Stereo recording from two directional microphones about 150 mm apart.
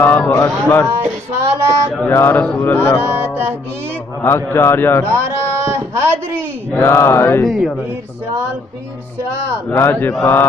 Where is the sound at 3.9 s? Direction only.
15° left (ahead or behind).